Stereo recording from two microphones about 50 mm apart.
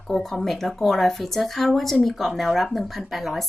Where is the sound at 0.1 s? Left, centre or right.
Centre.